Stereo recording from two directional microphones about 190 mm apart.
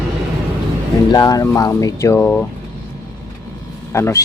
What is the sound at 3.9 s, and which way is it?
Speech, 15° left (ahead or behind).